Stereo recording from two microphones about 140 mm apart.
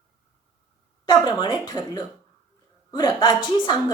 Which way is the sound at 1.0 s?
30° left (ahead or behind).